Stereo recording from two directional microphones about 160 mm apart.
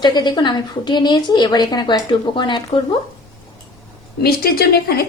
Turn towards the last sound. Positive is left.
turn(degrees=80)